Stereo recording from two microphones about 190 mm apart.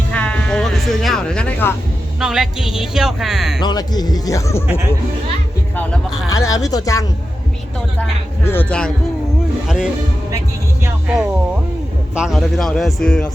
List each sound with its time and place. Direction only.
0.1 s music: 5° left (ahead or behind)
2.2 s speech: 5° right (ahead or behind)
3.6 s speech: 20° left (ahead or behind)
6.3 s speech: 20° left (ahead or behind)
8.4 s speech: 10° left (ahead or behind)
9.6 s speech: 5° right (ahead or behind)
12.1 s speech: centre (ahead or behind)